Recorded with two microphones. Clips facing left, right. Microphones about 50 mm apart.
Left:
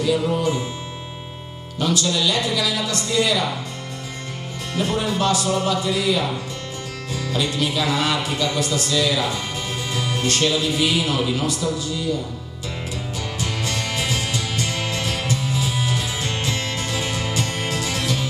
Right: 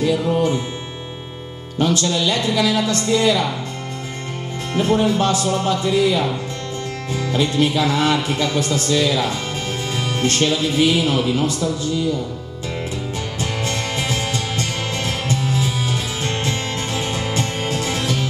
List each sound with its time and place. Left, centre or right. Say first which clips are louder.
0.0 s music: right 2 dB; right
1.8 s a woman's voice: right 3 dB; right
4.7 s a woman's voice: right 5 dB; right
13.4 s music: right 2 dB; right